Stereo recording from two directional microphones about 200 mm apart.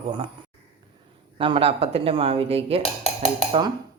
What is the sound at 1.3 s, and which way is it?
A woman's voice, 25° right (ahead or behind).